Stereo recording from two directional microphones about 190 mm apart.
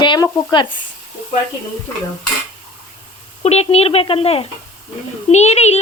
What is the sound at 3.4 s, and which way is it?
Speech, 35° left (ahead or behind).